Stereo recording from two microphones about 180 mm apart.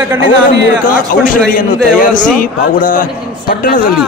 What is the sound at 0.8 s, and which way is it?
A man's voice, 50° left (ahead or behind).